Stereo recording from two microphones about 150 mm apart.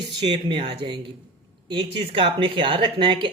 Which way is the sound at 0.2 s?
35° right (ahead or behind).